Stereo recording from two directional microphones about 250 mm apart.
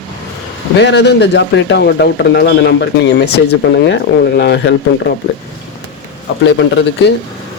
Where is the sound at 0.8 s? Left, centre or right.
Left.